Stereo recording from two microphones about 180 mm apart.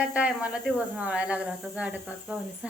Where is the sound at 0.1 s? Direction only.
5° right (ahead or behind).